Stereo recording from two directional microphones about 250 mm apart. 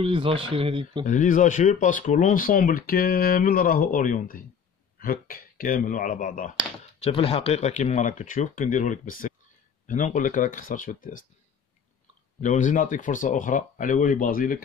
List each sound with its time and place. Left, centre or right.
0.0 s speech: right
1.0 s speech: left
12.4 s speech: left